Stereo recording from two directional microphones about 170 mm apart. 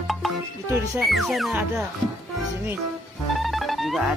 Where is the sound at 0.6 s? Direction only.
15° right (ahead or behind).